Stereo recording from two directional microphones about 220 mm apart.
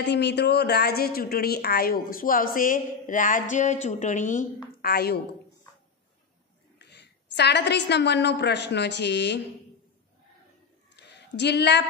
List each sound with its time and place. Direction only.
0.0 s speech: 50° left (ahead or behind); by 4.5 s 35° left (ahead or behind)
4.8 s a woman's voice: 45° left (ahead or behind)
6.8 s a woman's voice: 50° left (ahead or behind)
11.0 s a sound: 50° left (ahead or behind)